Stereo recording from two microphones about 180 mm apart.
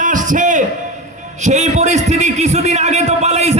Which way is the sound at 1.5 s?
40° right (ahead or behind).